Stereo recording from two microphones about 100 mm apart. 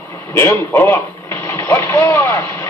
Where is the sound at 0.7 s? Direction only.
25° left (ahead or behind).